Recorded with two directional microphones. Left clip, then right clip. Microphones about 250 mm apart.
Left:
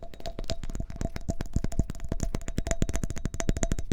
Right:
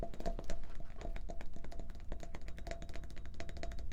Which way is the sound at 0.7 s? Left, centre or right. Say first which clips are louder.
Left 12 dB; left.